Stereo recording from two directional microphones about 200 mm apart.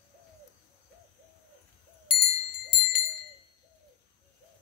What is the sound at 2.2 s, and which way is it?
Bell, 55° left (ahead or behind).